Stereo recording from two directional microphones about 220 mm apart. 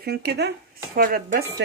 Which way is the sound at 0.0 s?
45° right (ahead or behind).